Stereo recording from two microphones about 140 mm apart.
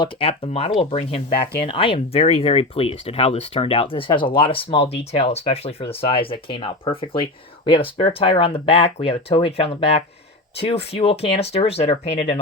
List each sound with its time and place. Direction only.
0.0 s speech: 40° left (ahead or behind)